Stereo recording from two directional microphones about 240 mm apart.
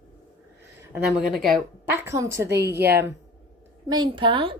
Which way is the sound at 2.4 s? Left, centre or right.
Right.